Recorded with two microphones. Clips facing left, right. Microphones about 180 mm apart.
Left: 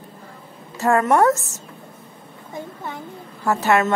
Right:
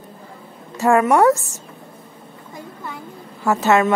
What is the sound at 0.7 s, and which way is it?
Speech, 15° right (ahead or behind).